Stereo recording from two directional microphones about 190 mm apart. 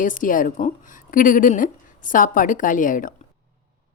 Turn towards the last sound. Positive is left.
turn(degrees=45)  # may be behind; listen again after turning